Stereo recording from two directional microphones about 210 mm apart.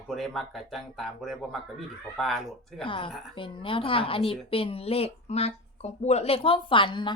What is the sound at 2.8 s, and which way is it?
A woman's voice, 25° left (ahead or behind).